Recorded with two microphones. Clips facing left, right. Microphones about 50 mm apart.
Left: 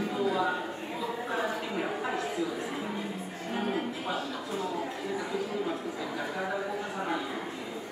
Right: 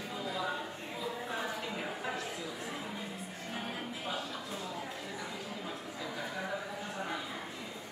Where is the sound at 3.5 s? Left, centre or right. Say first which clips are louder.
Left 9 dB; centre.